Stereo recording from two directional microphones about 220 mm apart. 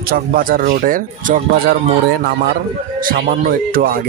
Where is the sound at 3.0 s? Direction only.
40° right (ahead or behind).